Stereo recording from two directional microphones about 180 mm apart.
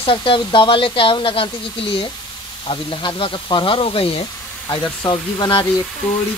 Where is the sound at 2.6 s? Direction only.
30° left (ahead or behind).